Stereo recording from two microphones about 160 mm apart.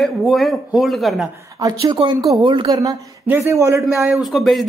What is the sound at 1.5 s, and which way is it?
A woman's voice, 25° right (ahead or behind).